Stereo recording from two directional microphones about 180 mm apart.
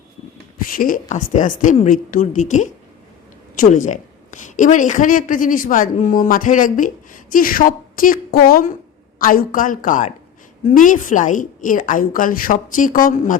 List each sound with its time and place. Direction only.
0.7 s a woman's voice: 50° left (ahead or behind)